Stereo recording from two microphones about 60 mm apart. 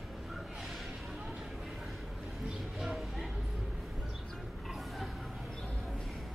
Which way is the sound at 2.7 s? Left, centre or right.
Centre.